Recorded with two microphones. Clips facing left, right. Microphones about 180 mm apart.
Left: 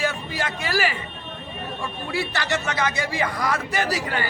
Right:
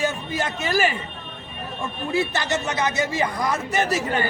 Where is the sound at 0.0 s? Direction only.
20° right (ahead or behind).